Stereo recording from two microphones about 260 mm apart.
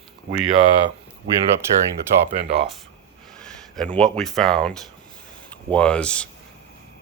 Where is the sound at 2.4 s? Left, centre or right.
Right.